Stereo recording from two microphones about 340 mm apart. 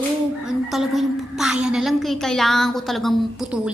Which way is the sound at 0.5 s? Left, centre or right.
Centre.